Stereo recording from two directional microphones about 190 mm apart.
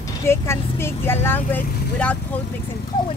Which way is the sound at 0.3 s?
15° left (ahead or behind).